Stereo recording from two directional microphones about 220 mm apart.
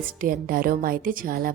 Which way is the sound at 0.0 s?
40° right (ahead or behind).